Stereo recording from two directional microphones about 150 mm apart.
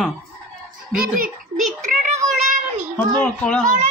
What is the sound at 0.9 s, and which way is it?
Speech, 70° right (ahead or behind).